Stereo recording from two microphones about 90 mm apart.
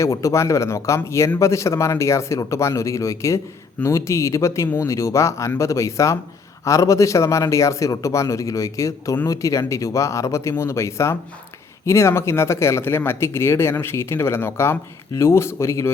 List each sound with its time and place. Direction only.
0.0 s speech: 35° left (ahead or behind)